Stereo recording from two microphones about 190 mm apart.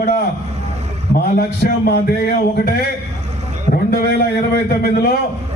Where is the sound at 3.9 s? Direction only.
55° left (ahead or behind).